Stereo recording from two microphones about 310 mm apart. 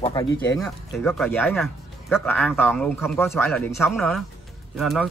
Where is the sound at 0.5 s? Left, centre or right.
Centre.